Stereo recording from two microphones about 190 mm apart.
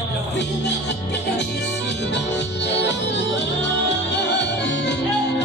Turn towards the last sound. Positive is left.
turn(degrees=65)  # may be behind; listen again after turning